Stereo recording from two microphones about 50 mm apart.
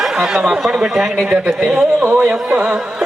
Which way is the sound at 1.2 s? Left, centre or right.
Right.